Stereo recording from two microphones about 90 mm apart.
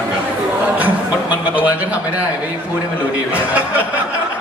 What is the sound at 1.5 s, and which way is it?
Speech, 15° right (ahead or behind).